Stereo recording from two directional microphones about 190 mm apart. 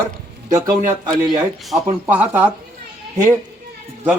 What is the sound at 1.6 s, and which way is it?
Speech, 5° right (ahead or behind).